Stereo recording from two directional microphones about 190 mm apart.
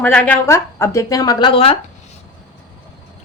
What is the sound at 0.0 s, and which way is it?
Speech, 10° left (ahead or behind).